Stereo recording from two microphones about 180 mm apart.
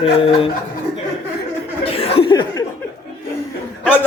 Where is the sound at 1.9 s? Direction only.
30° left (ahead or behind).